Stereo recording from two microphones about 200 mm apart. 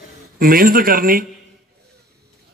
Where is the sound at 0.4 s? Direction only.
45° right (ahead or behind).